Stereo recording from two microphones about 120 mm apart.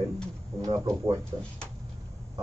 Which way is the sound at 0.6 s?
30° right (ahead or behind).